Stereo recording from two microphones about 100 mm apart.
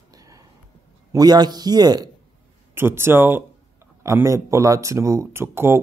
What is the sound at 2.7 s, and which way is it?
Speech, 25° right (ahead or behind).